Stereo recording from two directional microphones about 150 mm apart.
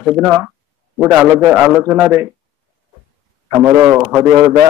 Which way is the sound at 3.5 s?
15° right (ahead or behind).